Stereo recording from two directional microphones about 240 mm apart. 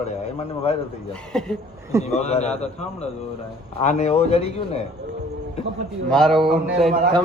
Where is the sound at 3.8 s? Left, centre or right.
Left.